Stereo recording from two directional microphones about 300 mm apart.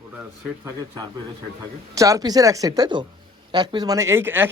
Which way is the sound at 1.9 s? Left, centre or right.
Centre.